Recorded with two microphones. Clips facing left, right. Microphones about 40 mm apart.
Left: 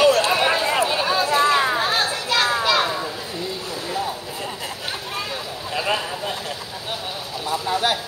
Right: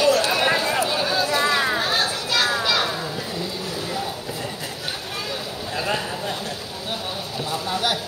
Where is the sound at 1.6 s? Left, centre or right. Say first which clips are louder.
Left 2 dB; left.